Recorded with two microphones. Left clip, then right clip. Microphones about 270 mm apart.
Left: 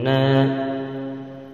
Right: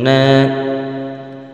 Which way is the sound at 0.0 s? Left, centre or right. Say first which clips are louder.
Right 8 dB; right.